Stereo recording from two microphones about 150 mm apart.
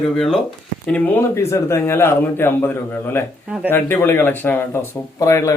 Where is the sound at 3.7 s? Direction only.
15° left (ahead or behind).